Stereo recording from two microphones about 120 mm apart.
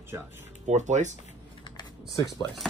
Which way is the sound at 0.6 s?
80° right.